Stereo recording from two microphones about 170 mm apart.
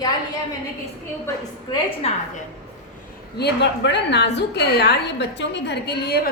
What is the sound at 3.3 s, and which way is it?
A woman's voice, 80° left.